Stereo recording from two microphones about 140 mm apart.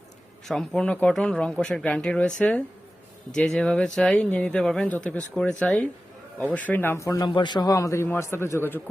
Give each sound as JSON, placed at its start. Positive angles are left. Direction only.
{"t": 0.4, "sound": "speech", "side_deg": 5}
{"t": 7.3, "sound": "a man's voice", "side_deg": 35}